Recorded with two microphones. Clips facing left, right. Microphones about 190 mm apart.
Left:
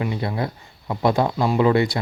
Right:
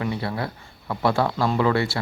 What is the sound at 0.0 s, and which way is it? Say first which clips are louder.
A man's voice: left 2 dB; 20° left (ahead or behind).